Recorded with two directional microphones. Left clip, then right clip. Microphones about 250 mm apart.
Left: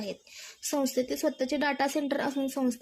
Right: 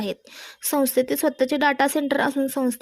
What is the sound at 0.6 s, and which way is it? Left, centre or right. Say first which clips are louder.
Speech: right 8 dB; right.